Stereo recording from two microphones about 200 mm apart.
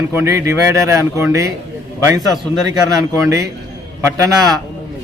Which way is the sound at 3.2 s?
15° right (ahead or behind).